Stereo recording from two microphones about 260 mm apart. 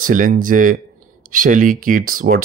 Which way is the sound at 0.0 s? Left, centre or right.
Right.